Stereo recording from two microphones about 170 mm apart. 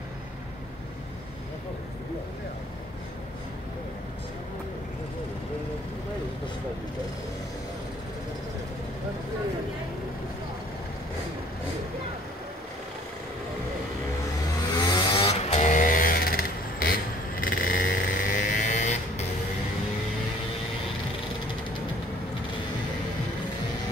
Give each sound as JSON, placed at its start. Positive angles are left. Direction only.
{"t": 14.8, "sound": "vehicle", "side_deg": 25}